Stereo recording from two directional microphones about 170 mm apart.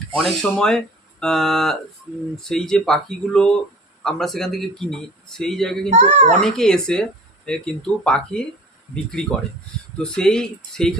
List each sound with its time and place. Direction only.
0.2 s speech: centre (ahead or behind)
5.9 s a child's voice: 40° right (ahead or behind)
6.4 s speech: 5° left (ahead or behind)
10.0 s speech: 5° left (ahead or behind)